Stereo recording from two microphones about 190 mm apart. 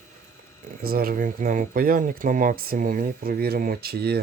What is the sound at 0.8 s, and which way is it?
Speech, 50° right (ahead or behind).